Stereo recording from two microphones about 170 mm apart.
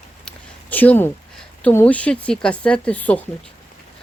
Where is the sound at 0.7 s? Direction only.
10° left (ahead or behind).